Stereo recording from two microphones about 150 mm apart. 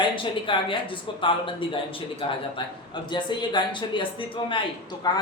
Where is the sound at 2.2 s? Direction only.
35° left (ahead or behind).